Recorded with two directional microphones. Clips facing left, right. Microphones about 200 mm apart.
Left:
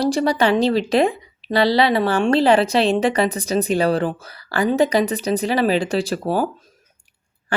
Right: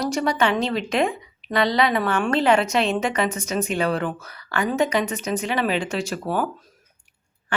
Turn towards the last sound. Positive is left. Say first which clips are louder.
# left 4 dB
turn(degrees=35)  # may be behind; listen again after turning